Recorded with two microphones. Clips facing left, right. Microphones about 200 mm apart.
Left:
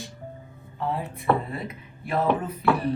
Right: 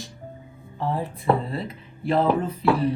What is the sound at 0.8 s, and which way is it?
Speech, 30° right (ahead or behind).